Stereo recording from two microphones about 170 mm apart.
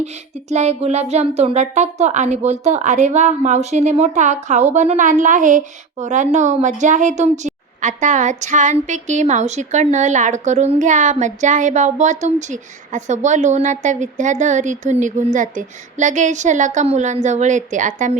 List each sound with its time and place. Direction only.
0.0 s speech: 40° right (ahead or behind)